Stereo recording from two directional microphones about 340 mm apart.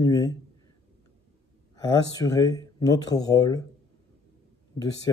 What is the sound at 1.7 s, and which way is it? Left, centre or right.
Speech, centre.